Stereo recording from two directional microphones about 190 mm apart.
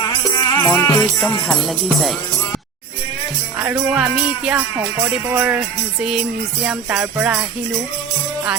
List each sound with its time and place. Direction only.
0.3 s music: 15° left (ahead or behind)
3.6 s music: 5° right (ahead or behind)
5.0 s speech: 10° right (ahead or behind)
6.0 s music: 5° right (ahead or behind)